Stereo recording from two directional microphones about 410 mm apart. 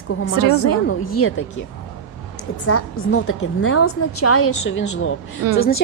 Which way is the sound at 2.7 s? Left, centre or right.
Left.